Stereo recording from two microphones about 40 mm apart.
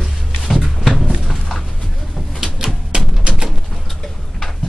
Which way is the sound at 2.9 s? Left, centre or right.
Right.